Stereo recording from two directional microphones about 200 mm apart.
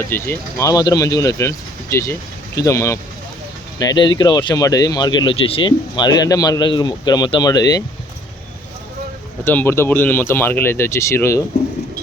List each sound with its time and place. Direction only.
0.1 s speech: 15° left (ahead or behind)
9.4 s speech: 10° left (ahead or behind)